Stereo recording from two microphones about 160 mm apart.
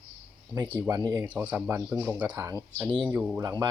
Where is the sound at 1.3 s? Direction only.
10° right (ahead or behind).